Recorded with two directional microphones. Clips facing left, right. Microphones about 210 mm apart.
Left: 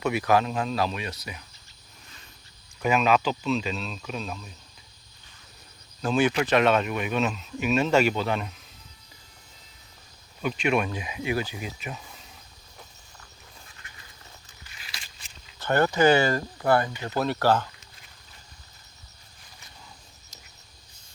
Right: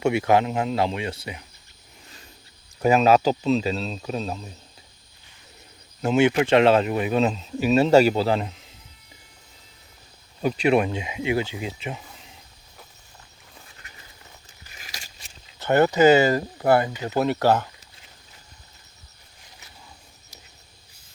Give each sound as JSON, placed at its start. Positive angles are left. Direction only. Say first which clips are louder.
{"t": 0.0, "sound": "speech", "louder": "right 3 dB", "side_deg": -25}
{"t": 2.8, "sound": "speech", "louder": "right 5 dB", "side_deg": -40}
{"t": 6.0, "sound": "speech", "louder": "right 4 dB", "side_deg": -25}
{"t": 10.4, "sound": "speech", "louder": "right 5 dB", "side_deg": -30}
{"t": 14.6, "sound": "scissors", "louder": "right 4 dB", "side_deg": -40}
{"t": 15.4, "sound": "speech", "louder": "right 4 dB", "side_deg": -20}